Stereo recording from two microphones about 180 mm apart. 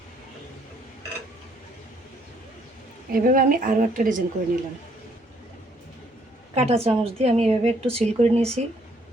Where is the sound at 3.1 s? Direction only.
50° right (ahead or behind).